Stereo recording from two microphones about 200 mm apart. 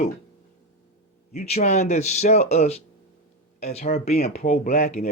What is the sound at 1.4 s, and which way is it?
Speech, 30° left (ahead or behind).